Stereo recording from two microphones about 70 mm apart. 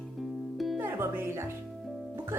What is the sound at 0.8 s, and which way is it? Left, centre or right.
Music, right.